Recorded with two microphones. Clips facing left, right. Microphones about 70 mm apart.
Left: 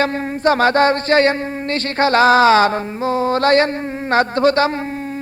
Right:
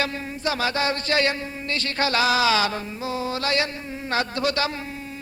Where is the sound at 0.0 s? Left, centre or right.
Left.